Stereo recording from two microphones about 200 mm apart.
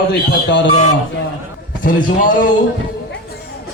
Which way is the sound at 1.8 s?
45° left (ahead or behind).